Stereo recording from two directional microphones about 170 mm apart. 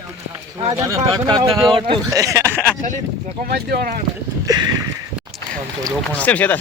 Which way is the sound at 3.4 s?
65° right (ahead or behind).